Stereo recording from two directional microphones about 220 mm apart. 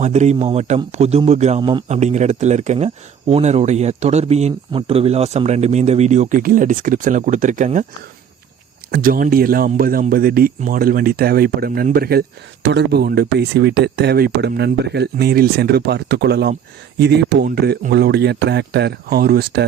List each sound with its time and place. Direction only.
0.0 s a man's voice: 30° right (ahead or behind)
8.9 s a man's voice: 40° right (ahead or behind)